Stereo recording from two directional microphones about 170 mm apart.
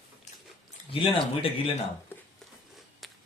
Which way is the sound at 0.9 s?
30° left (ahead or behind).